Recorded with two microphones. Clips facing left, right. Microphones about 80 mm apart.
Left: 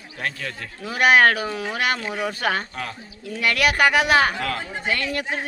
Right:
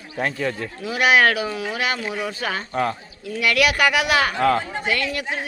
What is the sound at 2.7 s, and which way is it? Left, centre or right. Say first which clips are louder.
Speech: right 9 dB; right.